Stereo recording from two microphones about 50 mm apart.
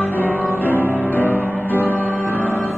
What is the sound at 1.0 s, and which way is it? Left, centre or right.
Music, left.